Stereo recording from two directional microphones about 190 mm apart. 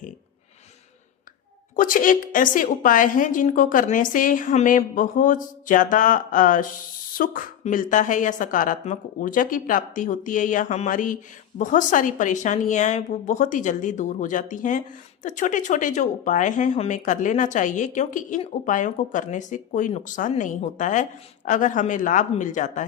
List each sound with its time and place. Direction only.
1.7 s a woman's voice: 45° left (ahead or behind)